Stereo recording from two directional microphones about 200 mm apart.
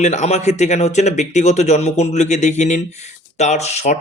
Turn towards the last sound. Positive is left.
turn(degrees=35)  # may be behind; listen again after turning